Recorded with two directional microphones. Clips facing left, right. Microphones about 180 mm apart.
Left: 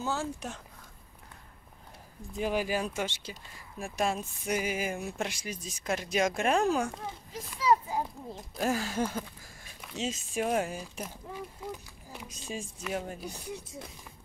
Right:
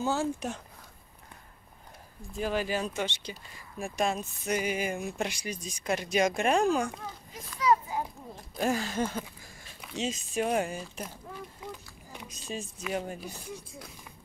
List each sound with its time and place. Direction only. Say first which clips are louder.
0.0 s speech: right 4 dB; 20° right (ahead or behind)
2.3 s speech: even; 15° left (ahead or behind)
7.5 s a sound: even; 30° left (ahead or behind)
8.5 s speech: right 1 dB; 5° left (ahead or behind)
12.8 s speech: right 2 dB; 5° right (ahead or behind)